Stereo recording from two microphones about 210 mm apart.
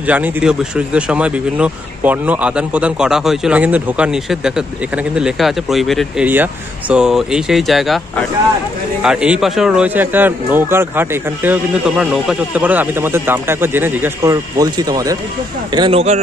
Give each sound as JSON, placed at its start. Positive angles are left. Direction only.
{"t": 0.0, "sound": "speech", "side_deg": -5}
{"t": 9.0, "sound": "speech", "side_deg": -5}